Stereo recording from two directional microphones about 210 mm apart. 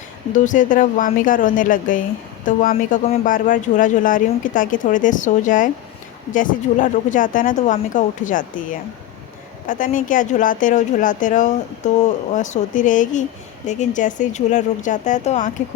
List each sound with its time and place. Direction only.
0.3 s speech: 35° left (ahead or behind)
9.6 s speech: 40° left (ahead or behind)